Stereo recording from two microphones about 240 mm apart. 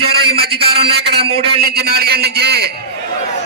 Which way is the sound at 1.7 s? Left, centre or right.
Right.